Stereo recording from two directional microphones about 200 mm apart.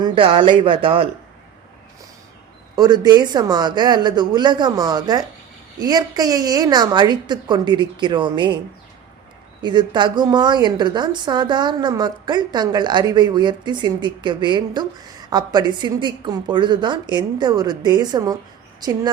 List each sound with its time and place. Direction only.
0.0 s a woman's voice: 25° right (ahead or behind)
2.7 s a woman's voice: 20° right (ahead or behind)
9.6 s a woman's voice: 20° right (ahead or behind)